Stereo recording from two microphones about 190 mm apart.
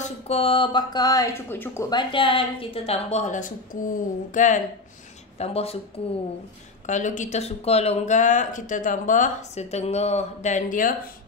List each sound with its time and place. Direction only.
0.3 s speech: 30° left (ahead or behind)
5.4 s speech: 30° left (ahead or behind)
6.9 s speech: 40° left (ahead or behind)